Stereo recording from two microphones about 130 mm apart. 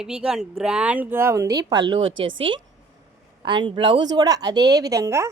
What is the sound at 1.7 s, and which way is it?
A woman's voice, 45° right (ahead or behind).